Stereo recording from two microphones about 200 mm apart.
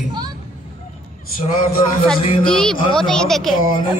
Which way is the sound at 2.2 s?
30° left (ahead or behind).